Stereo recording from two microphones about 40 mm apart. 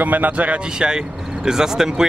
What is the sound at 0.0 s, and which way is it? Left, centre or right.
Speech, right.